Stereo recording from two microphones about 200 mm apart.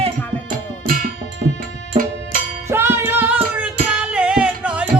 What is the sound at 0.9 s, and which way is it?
Music, 45° right (ahead or behind).